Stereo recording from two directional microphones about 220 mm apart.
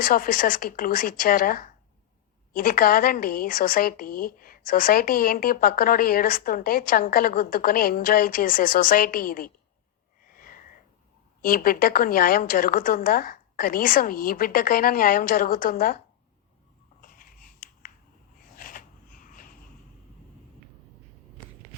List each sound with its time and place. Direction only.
0.0 s a woman's voice: 40° left (ahead or behind)
10.2 s sniff: 40° left (ahead or behind)
11.4 s a woman's voice: 40° left (ahead or behind)
17.0 s scissors: 40° left (ahead or behind)
18.5 s a sound: 40° left (ahead or behind)